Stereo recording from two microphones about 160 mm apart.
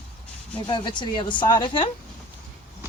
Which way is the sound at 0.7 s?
30° left (ahead or behind).